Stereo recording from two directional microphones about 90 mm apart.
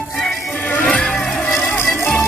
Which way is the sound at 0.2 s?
15° left (ahead or behind).